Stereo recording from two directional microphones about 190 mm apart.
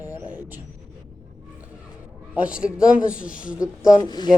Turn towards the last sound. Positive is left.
turn(degrees=20)  # may be behind; listen again after turning